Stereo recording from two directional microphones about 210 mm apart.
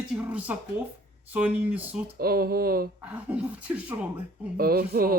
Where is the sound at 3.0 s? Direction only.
5° right (ahead or behind).